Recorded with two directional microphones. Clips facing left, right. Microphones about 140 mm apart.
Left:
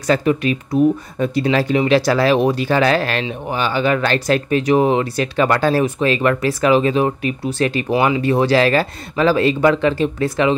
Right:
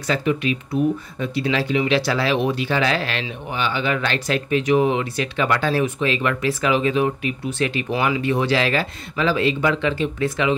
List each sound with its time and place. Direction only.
0.0 s speech: 45° left (ahead or behind)